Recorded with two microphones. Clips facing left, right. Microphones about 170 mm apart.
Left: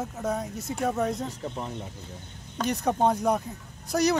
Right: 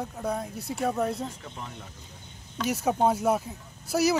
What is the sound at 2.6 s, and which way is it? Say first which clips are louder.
Speech: even; 5° right (ahead or behind).